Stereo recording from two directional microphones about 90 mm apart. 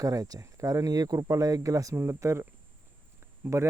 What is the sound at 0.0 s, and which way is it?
Speech, 40° right (ahead or behind).